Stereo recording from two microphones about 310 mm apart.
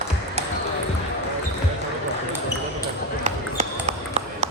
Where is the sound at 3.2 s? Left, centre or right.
Right.